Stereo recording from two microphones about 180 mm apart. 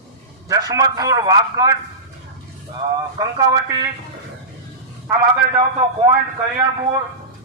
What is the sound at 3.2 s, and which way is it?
Speech, 20° right (ahead or behind).